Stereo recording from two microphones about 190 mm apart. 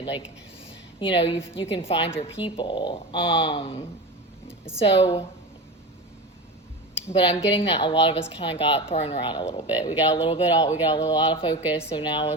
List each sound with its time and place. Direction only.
0.0 s speech: 30° left (ahead or behind)
7.1 s speech: 30° left (ahead or behind)